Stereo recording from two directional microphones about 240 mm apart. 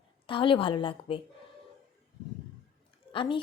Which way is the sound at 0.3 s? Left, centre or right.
Left.